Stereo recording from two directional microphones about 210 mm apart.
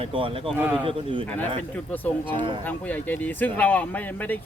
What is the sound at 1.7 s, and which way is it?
Speech, 10° left (ahead or behind).